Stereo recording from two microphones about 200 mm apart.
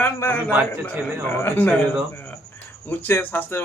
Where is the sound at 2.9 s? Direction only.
10° left (ahead or behind).